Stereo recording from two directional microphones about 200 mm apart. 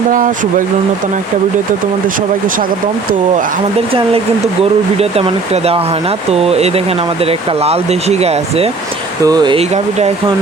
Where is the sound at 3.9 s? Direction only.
25° right (ahead or behind).